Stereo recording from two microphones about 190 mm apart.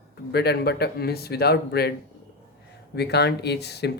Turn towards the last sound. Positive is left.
turn(degrees=60)  # may be behind; listen again after turning